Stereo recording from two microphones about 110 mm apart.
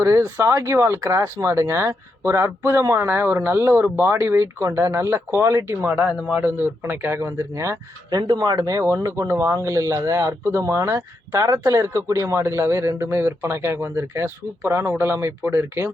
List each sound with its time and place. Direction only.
0.0 s speech: 25° right (ahead or behind)